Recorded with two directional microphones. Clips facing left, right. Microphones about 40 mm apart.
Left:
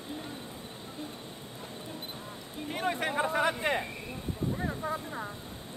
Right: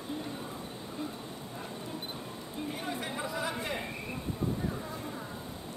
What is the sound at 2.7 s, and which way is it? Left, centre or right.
Speech, left.